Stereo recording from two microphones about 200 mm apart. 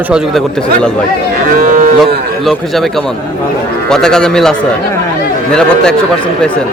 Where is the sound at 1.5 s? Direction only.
45° right (ahead or behind).